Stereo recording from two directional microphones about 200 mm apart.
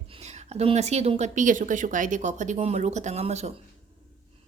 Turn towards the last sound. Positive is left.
turn(degrees=-35)  # may be behind; listen again after turning